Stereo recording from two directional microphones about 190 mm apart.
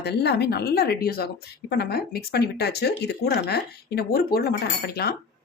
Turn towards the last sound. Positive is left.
turn(degrees=55)  # may be behind; listen again after turning